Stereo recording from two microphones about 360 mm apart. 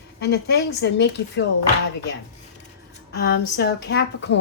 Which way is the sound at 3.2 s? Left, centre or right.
Left.